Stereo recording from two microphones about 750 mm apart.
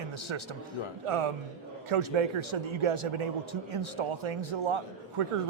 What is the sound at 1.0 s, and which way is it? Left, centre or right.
Speech, right.